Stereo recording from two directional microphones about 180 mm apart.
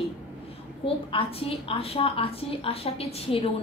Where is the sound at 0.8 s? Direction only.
30° left (ahead or behind).